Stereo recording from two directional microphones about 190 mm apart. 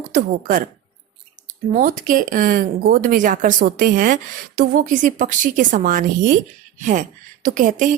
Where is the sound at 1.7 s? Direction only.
45° right (ahead or behind).